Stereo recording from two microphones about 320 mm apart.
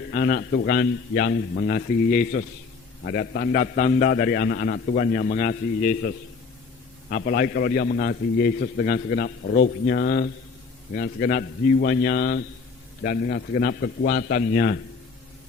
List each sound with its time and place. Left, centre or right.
0.1 s a man's voice: left
7.1 s a man's voice: left